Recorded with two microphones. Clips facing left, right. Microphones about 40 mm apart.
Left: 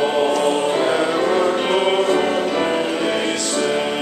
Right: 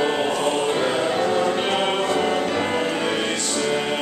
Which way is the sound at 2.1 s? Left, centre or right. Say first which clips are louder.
Left 3 dB; centre.